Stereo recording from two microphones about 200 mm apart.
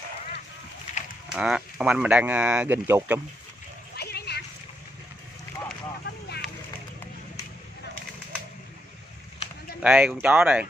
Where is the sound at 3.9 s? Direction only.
55° left (ahead or behind).